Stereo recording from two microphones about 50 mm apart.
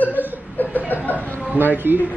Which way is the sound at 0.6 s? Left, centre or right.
Left.